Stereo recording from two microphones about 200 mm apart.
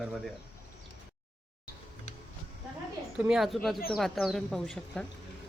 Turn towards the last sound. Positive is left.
turn(degrees=5)  # may be behind; listen again after turning